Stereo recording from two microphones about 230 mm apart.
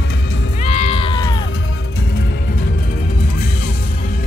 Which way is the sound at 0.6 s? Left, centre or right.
Left.